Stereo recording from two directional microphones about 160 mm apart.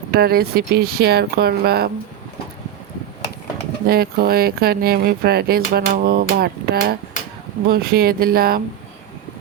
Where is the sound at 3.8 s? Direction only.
70° right (ahead or behind).